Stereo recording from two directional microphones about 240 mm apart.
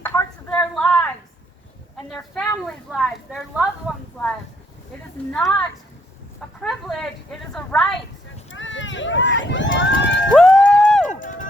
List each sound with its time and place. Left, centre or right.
0.0 s a sound: centre
2.0 s speech: centre
5.3 s speech: centre
8.4 s run: left
10.3 s run: centre
11.1 s run: left